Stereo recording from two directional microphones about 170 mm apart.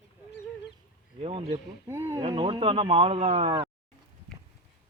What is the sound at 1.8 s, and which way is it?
Speech, 15° right (ahead or behind).